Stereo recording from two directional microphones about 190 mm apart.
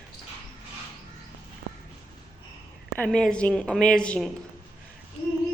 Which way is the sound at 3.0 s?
5° left (ahead or behind).